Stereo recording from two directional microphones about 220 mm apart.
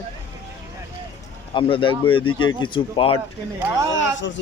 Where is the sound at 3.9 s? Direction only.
55° left (ahead or behind).